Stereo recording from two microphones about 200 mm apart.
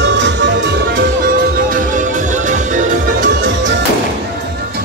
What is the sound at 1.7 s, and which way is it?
Music, 40° right (ahead or behind).